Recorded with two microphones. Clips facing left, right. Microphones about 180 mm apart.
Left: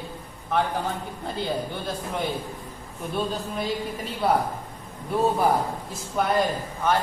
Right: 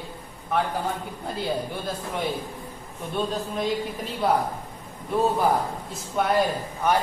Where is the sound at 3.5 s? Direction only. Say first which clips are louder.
Right 2 dB; centre (ahead or behind).